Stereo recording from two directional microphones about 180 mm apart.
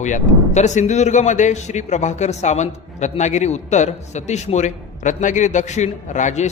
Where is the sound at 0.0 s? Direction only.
40° left (ahead or behind).